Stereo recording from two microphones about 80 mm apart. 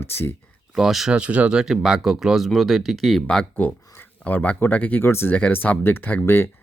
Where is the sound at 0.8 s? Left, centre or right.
Centre.